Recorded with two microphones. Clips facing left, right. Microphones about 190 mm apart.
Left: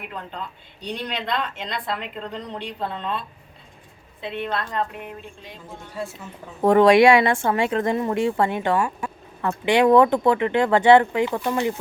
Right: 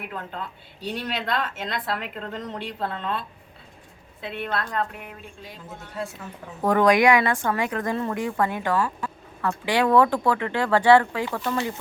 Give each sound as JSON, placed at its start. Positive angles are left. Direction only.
{"t": 0.1, "sound": "a woman's voice", "side_deg": -5}
{"t": 4.2, "sound": "a woman's voice", "side_deg": -5}
{"t": 6.6, "sound": "speech", "side_deg": 25}